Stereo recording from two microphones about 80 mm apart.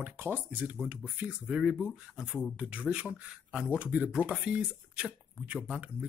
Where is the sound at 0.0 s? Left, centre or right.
Right.